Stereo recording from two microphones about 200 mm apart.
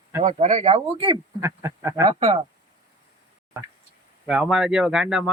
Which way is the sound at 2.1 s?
35° right (ahead or behind).